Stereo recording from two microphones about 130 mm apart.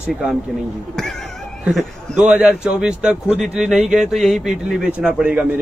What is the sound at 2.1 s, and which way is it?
Speech, 10° right (ahead or behind).